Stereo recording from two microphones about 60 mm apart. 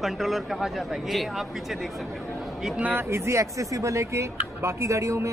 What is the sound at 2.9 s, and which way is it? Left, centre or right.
Speech, right.